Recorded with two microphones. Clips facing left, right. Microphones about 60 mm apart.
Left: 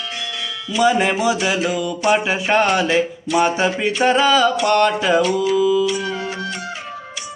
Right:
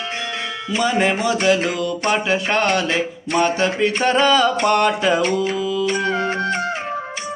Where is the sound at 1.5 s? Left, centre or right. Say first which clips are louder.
Left 1 dB; right.